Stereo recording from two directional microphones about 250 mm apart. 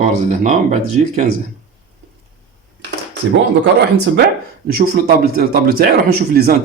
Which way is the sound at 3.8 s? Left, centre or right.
Right.